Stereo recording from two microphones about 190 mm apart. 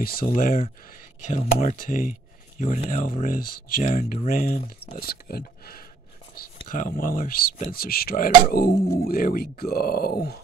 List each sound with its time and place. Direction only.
0.0 s speech: 50° left (ahead or behind)
5.0 s speech: 55° left (ahead or behind)